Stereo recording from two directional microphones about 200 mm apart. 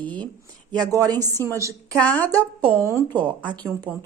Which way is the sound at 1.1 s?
10° left (ahead or behind).